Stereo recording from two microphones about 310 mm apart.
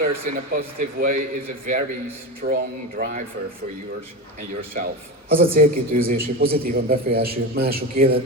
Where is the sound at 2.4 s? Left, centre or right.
Right.